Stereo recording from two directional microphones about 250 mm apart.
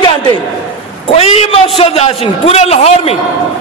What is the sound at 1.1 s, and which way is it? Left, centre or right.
Speech, left.